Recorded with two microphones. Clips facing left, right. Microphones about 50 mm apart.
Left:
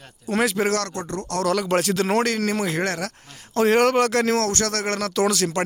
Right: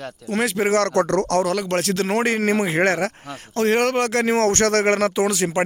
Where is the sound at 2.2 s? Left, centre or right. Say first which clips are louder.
Right 3 dB; right.